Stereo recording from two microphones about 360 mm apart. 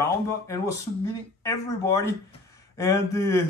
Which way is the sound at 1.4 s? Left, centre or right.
Centre.